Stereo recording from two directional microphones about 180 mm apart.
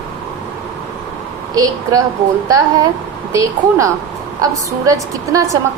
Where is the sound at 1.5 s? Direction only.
20° right (ahead or behind).